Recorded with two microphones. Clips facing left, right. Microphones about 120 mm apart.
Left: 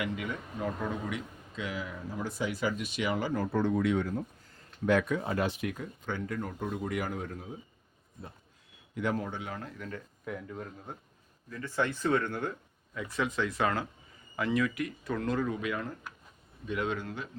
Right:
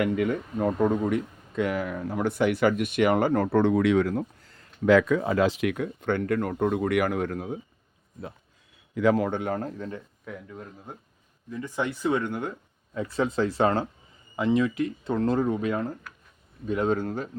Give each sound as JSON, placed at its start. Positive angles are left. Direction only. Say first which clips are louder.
{"t": 0.0, "sound": "speech", "louder": "right 10 dB", "side_deg": -50}
{"t": 9.0, "sound": "speech", "louder": "right 10 dB", "side_deg": -85}
{"t": 10.2, "sound": "speech", "louder": "left 3 dB", "side_deg": 0}
{"t": 11.5, "sound": "speech", "louder": "right 2 dB", "side_deg": -15}
{"t": 12.9, "sound": "speech", "louder": "right 6 dB", "side_deg": -30}